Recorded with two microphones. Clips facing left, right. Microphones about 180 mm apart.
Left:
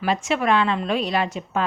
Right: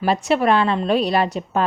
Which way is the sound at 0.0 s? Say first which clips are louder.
Right 4 dB; 35° right (ahead or behind).